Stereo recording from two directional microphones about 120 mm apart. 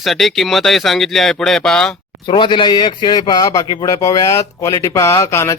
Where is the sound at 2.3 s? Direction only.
40° left (ahead or behind).